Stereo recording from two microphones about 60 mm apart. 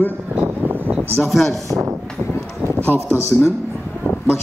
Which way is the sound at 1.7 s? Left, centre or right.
Right.